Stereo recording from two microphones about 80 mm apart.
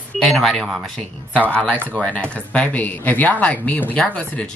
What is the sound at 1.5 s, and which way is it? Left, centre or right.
Speech, centre.